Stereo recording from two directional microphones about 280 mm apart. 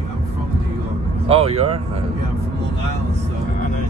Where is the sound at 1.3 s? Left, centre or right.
Right.